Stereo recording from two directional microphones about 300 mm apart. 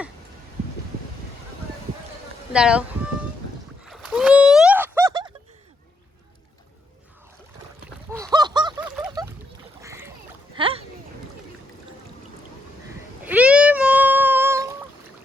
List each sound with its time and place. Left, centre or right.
2.5 s a sound: centre
8.2 s goose: centre
9.2 s splash: centre
9.8 s duck: centre
10.6 s splash: centre
13.2 s cat: centre